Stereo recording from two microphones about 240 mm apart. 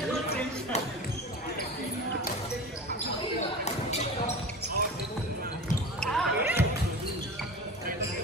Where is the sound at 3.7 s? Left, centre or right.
Left.